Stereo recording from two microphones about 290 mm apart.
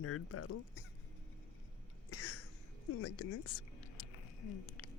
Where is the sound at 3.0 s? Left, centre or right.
Left.